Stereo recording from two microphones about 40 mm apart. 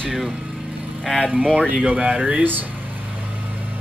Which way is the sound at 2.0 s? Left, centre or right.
Right.